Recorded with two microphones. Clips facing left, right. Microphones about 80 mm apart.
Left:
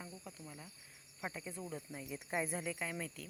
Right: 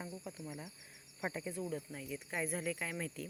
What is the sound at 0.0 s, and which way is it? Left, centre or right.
Cricket, centre.